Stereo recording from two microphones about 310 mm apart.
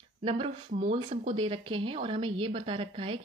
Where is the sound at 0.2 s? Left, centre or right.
Centre.